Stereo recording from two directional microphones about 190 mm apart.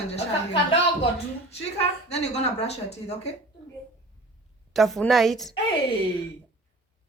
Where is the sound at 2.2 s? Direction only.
35° left (ahead or behind).